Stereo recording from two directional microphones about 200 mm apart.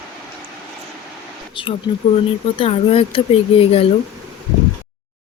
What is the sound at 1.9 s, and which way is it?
Speech, 25° left (ahead or behind).